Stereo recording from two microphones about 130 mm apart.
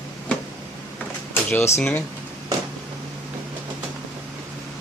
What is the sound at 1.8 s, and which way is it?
Speech, 15° left (ahead or behind).